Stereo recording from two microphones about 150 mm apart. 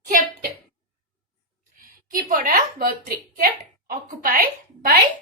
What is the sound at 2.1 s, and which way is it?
A woman's voice, 70° right (ahead or behind).